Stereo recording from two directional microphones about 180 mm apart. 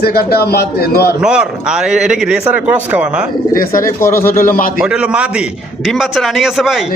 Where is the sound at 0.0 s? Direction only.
60° left (ahead or behind).